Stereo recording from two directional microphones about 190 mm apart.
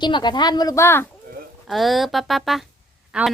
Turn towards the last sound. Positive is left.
turn(degrees=-5)  # may be behind; listen again after turning